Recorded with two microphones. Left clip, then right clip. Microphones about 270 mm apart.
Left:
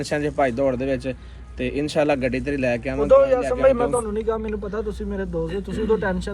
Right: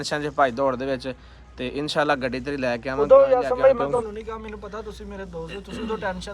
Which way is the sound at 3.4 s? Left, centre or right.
Centre.